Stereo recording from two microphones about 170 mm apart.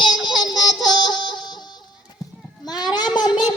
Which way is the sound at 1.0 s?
25° left (ahead or behind).